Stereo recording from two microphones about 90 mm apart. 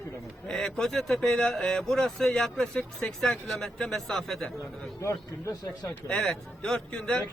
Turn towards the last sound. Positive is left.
turn(degrees=10)  # may be behind; listen again after turning